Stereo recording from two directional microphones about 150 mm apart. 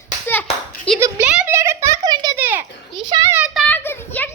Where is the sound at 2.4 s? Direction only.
15° right (ahead or behind).